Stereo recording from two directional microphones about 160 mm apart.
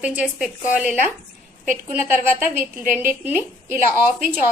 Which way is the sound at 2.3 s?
10° right (ahead or behind).